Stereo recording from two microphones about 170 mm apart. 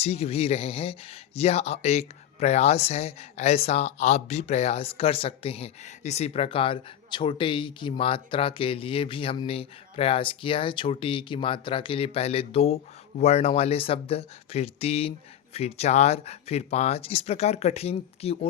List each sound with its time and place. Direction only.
0.0 s speech: 35° left (ahead or behind)